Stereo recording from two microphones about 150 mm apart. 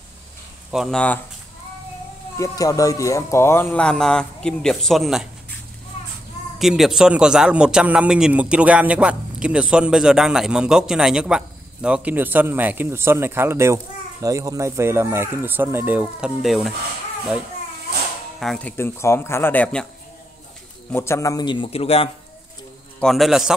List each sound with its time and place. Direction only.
0.7 s a man's voice: centre (ahead or behind)
2.3 s speech: 20° left (ahead or behind)
3.8 s a man's voice: 5° left (ahead or behind)
6.6 s a man's voice: centre (ahead or behind)
18.4 s speech: 5° left (ahead or behind)
20.9 s a man's voice: 15° left (ahead or behind); by 22.1 s 40° left (ahead or behind)
22.9 s a man's voice: centre (ahead or behind)